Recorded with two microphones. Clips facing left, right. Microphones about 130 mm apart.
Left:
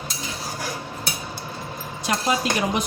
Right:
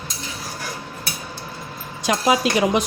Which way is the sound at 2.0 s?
90° right.